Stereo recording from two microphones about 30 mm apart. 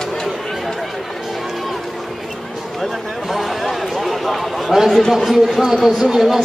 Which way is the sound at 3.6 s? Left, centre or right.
Centre.